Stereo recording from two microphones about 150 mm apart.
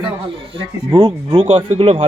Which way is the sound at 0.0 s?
35° right (ahead or behind).